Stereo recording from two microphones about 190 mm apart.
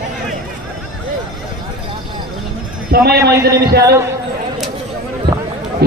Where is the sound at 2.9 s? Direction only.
55° right (ahead or behind).